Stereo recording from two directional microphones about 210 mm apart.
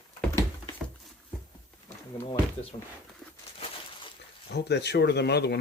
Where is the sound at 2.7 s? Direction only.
25° left (ahead or behind).